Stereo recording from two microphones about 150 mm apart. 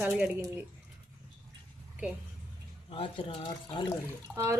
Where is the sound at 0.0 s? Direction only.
10° right (ahead or behind).